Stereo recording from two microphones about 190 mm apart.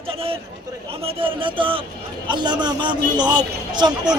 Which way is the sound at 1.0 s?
30° right (ahead or behind).